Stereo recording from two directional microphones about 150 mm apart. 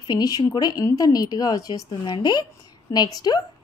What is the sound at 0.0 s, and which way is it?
Speech, 25° left (ahead or behind).